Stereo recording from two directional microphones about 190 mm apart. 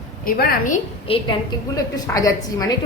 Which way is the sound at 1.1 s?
30° left (ahead or behind).